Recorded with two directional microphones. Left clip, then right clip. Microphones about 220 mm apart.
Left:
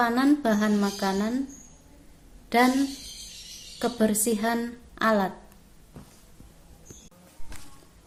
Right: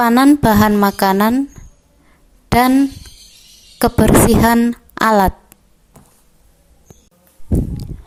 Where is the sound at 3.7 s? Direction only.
50° right (ahead or behind).